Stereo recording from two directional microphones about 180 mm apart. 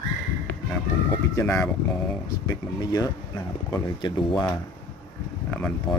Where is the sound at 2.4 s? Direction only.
20° left (ahead or behind).